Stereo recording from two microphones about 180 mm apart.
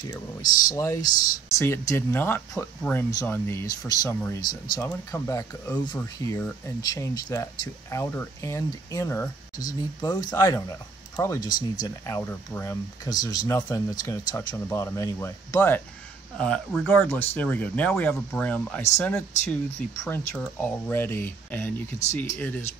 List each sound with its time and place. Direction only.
0.0 s speech: 20° left (ahead or behind)